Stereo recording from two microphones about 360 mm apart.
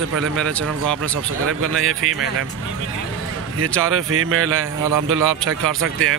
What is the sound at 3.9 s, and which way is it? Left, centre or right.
Speech, right.